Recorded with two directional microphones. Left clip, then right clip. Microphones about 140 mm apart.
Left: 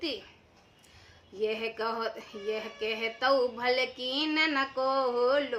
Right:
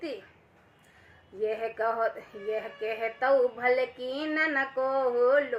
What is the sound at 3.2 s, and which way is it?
A woman's voice, 20° left (ahead or behind).